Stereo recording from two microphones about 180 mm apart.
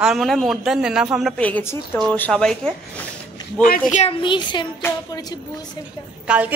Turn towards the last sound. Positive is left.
turn(degrees=-5)  # may be behind; listen again after turning